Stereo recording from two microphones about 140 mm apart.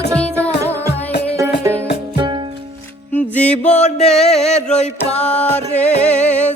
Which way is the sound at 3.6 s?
55° left (ahead or behind).